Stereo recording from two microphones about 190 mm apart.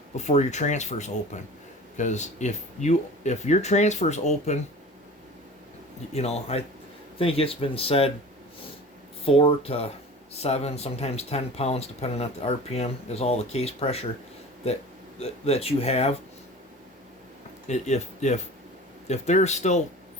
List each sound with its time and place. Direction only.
0.2 s speech: 35° left (ahead or behind)
6.1 s speech: 35° left (ahead or behind)
9.2 s speech: 30° left (ahead or behind)
15.2 s speech: 35° left (ahead or behind)
17.7 s speech: 35° left (ahead or behind)